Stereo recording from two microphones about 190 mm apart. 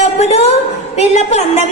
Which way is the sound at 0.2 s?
35° left (ahead or behind).